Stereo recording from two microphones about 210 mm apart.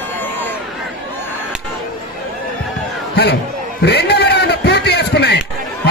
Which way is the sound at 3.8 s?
50° left (ahead or behind).